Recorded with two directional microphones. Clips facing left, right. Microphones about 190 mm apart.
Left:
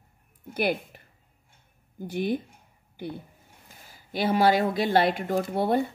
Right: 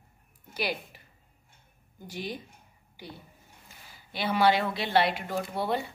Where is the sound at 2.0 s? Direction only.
55° left (ahead or behind).